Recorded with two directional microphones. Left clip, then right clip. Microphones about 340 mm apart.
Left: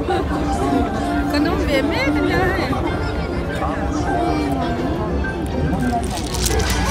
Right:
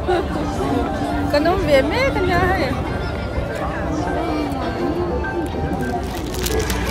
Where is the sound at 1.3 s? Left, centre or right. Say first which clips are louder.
Right 6 dB; centre.